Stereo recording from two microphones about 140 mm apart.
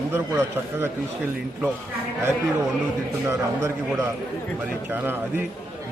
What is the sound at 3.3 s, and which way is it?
A man's voice, 20° right (ahead or behind).